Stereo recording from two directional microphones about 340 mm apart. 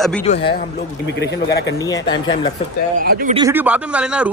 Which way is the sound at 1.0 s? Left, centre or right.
Left.